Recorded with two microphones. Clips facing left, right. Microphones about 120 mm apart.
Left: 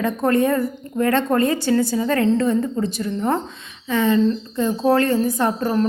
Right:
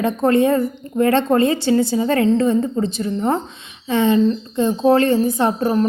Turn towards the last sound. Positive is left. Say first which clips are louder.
# right 2 dB
turn(degrees=-25)  # may be behind; listen again after turning